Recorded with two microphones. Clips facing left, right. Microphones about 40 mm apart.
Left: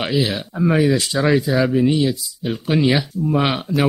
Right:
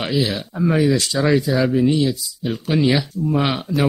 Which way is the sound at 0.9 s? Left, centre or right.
Centre.